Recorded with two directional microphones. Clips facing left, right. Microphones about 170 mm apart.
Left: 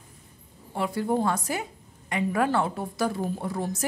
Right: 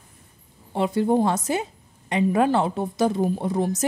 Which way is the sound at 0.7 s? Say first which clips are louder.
Right 6 dB; 25° right (ahead or behind).